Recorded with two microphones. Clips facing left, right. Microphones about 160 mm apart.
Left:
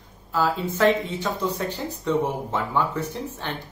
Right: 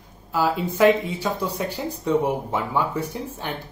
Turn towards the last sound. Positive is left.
turn(degrees=-10)  # may be behind; listen again after turning